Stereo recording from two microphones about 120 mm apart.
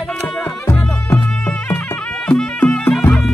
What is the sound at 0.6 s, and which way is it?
Music, 20° left (ahead or behind).